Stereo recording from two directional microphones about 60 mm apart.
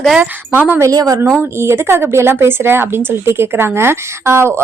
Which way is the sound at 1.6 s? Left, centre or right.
Right.